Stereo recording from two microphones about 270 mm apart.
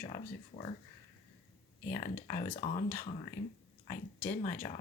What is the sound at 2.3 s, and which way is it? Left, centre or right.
Speech, left.